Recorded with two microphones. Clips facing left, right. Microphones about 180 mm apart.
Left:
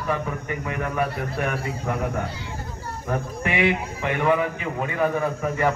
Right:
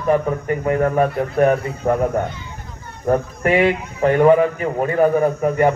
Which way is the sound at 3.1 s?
45° right (ahead or behind).